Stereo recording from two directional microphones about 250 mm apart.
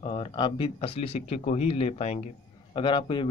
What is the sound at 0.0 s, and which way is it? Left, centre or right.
Speech, left.